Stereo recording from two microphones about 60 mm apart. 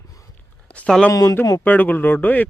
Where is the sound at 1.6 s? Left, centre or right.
Left.